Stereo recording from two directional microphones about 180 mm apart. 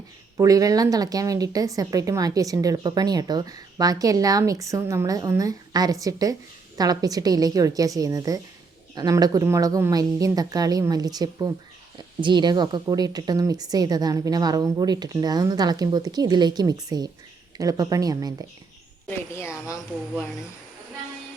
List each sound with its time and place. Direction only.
0.3 s speech: 20° right (ahead or behind)
19.0 s a woman's voice: 15° left (ahead or behind)